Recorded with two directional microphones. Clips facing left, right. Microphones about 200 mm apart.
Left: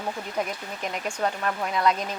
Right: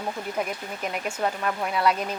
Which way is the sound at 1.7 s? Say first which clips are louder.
Even; 10° right (ahead or behind).